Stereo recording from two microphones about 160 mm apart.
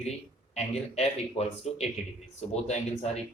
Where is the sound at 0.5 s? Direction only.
40° left (ahead or behind).